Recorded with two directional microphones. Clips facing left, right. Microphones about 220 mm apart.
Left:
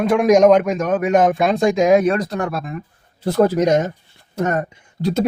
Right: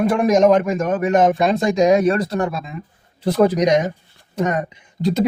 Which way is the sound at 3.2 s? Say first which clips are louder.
Even; 15° right (ahead or behind).